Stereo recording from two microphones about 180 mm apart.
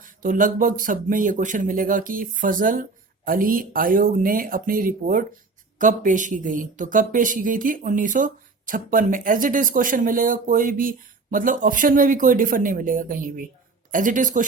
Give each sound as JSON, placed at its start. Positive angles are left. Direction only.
{"t": 0.0, "sound": "speech", "side_deg": -45}